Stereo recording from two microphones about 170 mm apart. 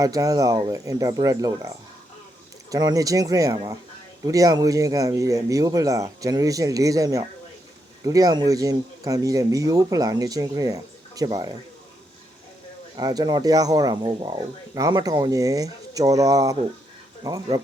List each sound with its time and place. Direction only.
0.0 s speech: 20° right (ahead or behind)
13.0 s speech: 25° right (ahead or behind)